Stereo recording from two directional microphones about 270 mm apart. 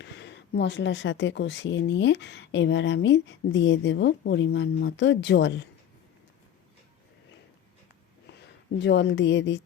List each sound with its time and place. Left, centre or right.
0.0 s speech: left
8.8 s speech: left